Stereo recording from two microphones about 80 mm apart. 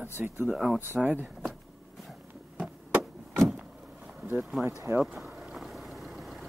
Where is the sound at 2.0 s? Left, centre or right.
Centre.